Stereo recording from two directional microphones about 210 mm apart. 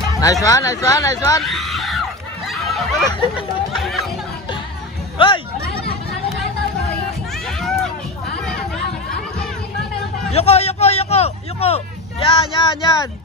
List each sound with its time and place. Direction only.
0.1 s speech: 15° left (ahead or behind)
1.4 s screaming: centre (ahead or behind)
3.1 s speech: 25° left (ahead or behind)
3.7 s speech: centre (ahead or behind)
5.1 s speech: 25° left (ahead or behind)
7.4 s a sound: centre (ahead or behind)
10.3 s speech: 30° left (ahead or behind)